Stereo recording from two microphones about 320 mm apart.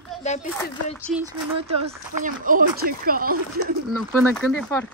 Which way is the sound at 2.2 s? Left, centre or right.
Right.